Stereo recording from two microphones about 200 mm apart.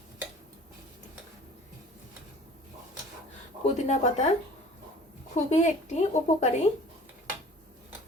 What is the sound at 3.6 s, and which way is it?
Speech, 35° left (ahead or behind).